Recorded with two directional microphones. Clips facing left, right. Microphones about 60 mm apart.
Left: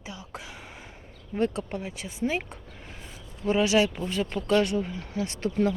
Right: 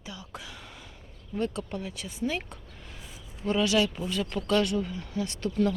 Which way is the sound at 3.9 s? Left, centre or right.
Left.